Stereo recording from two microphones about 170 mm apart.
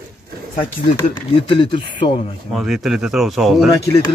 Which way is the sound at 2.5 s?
Centre (ahead or behind).